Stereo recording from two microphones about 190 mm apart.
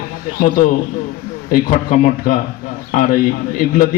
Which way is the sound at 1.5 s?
45° left (ahead or behind).